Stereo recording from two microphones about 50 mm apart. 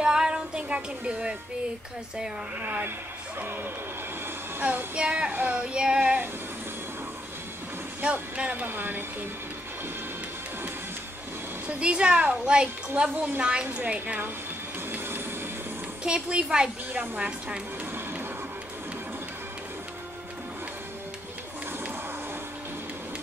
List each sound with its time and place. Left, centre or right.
0.0 s music: centre
2.6 s a woman's voice: right
4.9 s child singing: right
8.0 s child singing: right
8.6 s a woman's voice: right
11.8 s child singing: right
12.4 s child singing: right
13.1 s a woman's voice: right
13.4 s child singing: right
13.7 s a woman's voice: right
14.9 s vehicle: right
16.0 s a woman's voice: centre
16.9 s a woman's voice: right